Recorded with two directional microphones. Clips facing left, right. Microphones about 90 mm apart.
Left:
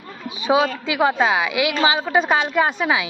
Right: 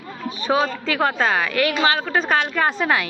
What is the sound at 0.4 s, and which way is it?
A woman's voice, 10° left (ahead or behind).